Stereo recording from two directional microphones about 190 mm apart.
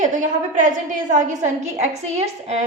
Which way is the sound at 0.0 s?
45° right (ahead or behind).